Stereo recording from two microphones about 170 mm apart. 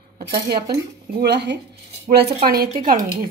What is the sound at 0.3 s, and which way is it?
Speech, 65° right (ahead or behind).